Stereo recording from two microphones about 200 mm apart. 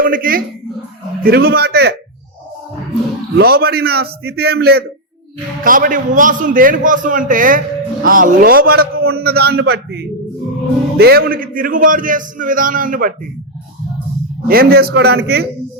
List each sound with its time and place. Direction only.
0.0 s a man's voice: 45° right (ahead or behind)
3.3 s a man's voice: 50° right (ahead or behind)
14.4 s a man's voice: 50° right (ahead or behind)